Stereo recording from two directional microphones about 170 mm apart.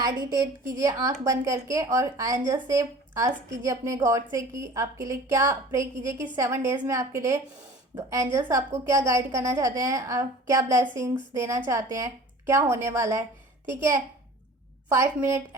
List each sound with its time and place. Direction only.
0.0 s a woman's voice: 25° right (ahead or behind)